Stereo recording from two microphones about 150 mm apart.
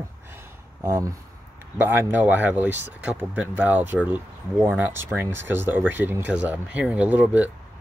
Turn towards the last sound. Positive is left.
turn(degrees=-10)  # may be behind; listen again after turning